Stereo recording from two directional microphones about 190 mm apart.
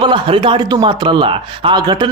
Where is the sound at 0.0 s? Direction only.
25° right (ahead or behind).